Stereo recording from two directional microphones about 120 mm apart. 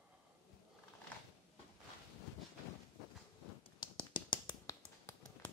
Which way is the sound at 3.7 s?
40° left (ahead or behind).